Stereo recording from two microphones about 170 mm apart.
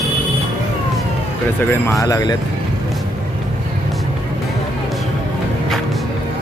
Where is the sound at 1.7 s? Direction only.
15° left (ahead or behind).